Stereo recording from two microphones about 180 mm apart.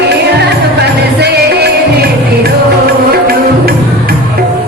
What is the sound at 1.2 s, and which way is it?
Music, 60° right (ahead or behind).